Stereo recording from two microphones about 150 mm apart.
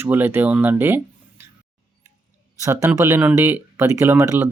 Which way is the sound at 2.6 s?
20° right (ahead or behind).